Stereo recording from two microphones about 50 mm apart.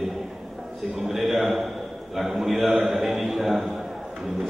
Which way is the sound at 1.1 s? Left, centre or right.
Centre.